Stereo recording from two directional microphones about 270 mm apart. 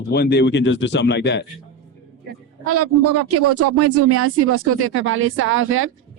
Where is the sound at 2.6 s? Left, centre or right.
Right.